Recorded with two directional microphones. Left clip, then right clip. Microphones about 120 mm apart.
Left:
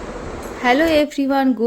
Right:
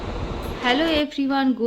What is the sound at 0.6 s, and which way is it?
Speech, 45° left (ahead or behind).